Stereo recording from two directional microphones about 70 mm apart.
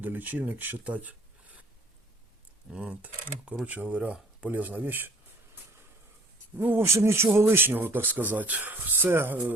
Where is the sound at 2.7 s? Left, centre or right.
Centre.